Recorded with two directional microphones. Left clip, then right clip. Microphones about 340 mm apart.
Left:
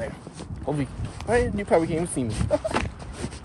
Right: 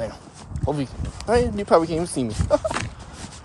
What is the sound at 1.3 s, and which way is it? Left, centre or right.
Speech, centre.